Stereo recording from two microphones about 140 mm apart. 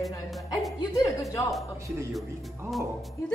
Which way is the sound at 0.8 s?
25° left (ahead or behind).